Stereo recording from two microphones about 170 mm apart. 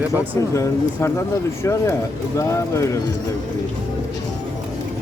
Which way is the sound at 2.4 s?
15° left (ahead or behind).